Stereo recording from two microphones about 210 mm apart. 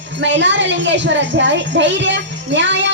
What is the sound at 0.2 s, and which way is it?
A woman's voice, 60° right (ahead or behind).